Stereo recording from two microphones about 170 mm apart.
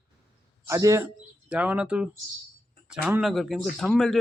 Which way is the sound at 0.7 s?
15° right (ahead or behind).